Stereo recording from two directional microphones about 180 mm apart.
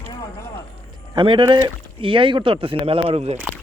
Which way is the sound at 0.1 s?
20° left (ahead or behind).